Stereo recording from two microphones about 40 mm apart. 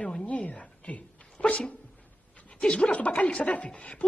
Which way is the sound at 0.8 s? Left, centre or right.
Left.